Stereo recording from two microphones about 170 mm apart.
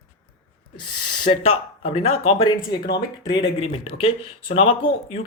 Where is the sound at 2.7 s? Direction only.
75° left (ahead or behind).